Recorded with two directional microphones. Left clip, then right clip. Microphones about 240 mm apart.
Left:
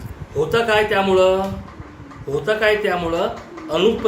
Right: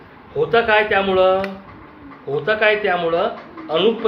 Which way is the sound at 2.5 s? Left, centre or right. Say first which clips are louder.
Right 1 dB; centre.